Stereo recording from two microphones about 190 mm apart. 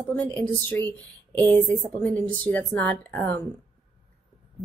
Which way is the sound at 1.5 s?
10° left (ahead or behind).